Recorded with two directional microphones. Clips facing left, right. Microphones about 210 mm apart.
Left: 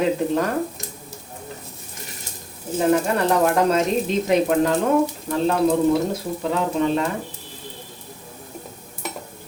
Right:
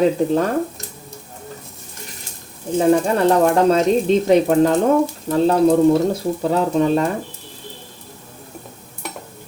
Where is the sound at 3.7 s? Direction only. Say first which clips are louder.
Right 5 dB; 30° right (ahead or behind).